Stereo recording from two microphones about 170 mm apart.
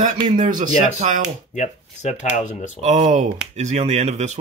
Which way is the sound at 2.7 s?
40° right (ahead or behind).